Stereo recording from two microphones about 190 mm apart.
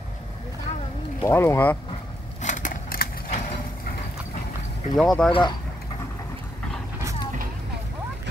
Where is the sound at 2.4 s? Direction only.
40° left (ahead or behind).